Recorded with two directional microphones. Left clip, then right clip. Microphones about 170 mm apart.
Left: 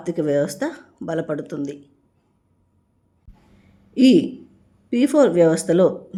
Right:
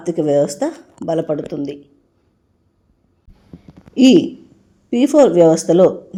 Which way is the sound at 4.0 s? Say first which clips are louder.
Right 4 dB; 30° left (ahead or behind).